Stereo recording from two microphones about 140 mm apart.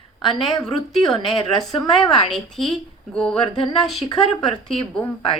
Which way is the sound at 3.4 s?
35° left (ahead or behind).